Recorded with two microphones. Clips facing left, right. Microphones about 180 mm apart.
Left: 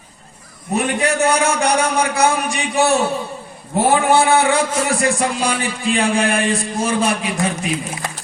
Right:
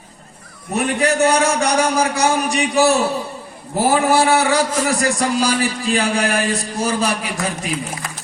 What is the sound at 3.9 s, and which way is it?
A man's voice, 35° right (ahead or behind).